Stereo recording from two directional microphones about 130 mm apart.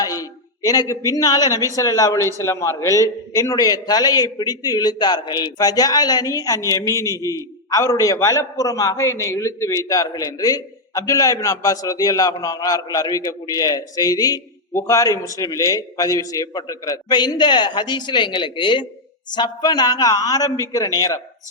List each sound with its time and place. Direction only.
0.0 s a man's voice: 25° left (ahead or behind)